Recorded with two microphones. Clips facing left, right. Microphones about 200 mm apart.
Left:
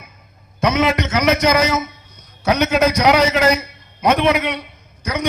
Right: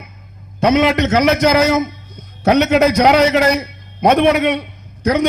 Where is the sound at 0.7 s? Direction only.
60° right (ahead or behind).